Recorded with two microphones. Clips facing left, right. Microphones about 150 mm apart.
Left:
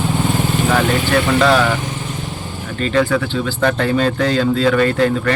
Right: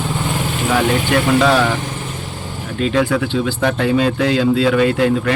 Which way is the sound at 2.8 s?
10° right (ahead or behind).